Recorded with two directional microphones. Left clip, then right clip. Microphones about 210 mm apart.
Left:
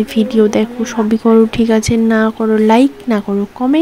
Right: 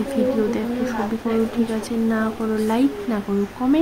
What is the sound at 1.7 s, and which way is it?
A woman's voice, 45° left (ahead or behind).